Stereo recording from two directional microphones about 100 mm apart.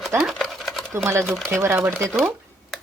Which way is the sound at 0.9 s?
25° right (ahead or behind).